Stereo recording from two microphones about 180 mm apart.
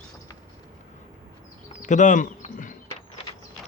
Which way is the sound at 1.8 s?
45° left (ahead or behind).